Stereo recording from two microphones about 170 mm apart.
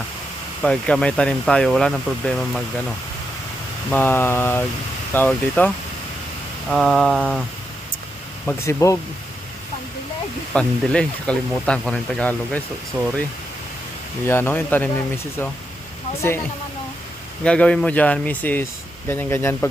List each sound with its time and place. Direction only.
0.6 s speech: 5° left (ahead or behind)
3.9 s speech: 10° left (ahead or behind)
8.4 s speech: 15° left (ahead or behind)
10.5 s speech: 5° left (ahead or behind)
14.3 s speech: 10° left (ahead or behind)
17.4 s speech: 5° left (ahead or behind)